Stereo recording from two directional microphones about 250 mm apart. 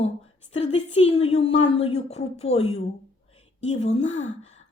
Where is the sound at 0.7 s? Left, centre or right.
Left.